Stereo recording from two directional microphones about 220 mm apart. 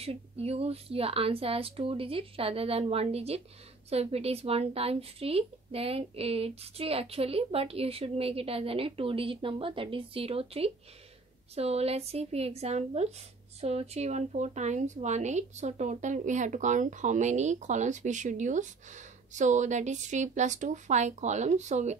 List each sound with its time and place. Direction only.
0.0 s a woman's voice: 25° right (ahead or behind)